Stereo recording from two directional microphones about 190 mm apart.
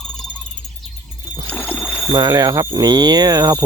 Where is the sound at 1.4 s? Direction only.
10° left (ahead or behind).